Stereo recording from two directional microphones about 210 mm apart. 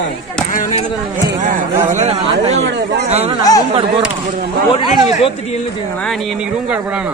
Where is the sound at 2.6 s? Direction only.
55° right (ahead or behind).